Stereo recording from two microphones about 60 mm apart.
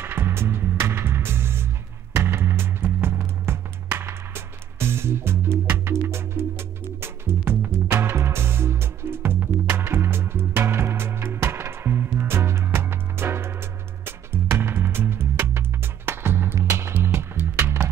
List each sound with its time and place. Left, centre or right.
0.0 s music: right
16.5 s music: right
16.9 s music: right